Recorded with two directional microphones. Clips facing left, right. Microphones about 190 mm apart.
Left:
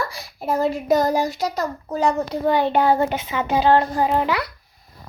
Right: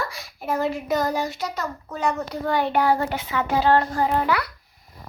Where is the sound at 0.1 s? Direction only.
35° left (ahead or behind).